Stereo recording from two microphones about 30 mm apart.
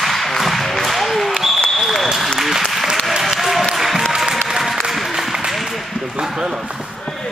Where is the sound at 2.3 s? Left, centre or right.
Centre.